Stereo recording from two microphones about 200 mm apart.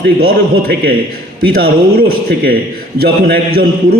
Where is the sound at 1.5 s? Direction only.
50° right (ahead or behind).